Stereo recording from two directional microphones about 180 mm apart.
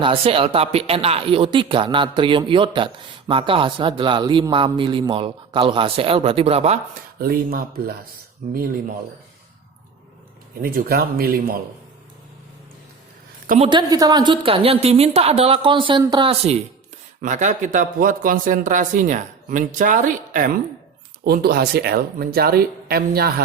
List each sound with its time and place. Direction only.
0.0 s speech: 30° right (ahead or behind)
7.2 s speech: 55° right (ahead or behind)
8.4 s a woman's voice: 40° right (ahead or behind)
10.6 s speech: 55° right (ahead or behind)
13.7 s a woman's voice: 25° right (ahead or behind); by 20.6 s 50° right (ahead or behind)
21.2 s speech: 60° right (ahead or behind)